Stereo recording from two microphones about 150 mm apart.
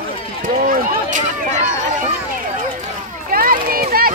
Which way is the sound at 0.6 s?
60° right (ahead or behind).